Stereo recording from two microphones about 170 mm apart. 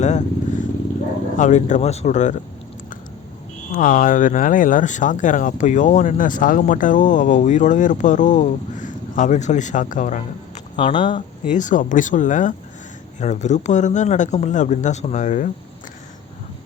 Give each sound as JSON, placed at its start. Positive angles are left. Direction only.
{"t": 0.0, "sound": "speech", "side_deg": 45}
{"t": 1.4, "sound": "speech", "side_deg": 45}
{"t": 3.7, "sound": "speech", "side_deg": 50}
{"t": 10.8, "sound": "speech", "side_deg": 30}
{"t": 11.4, "sound": "speech", "side_deg": 50}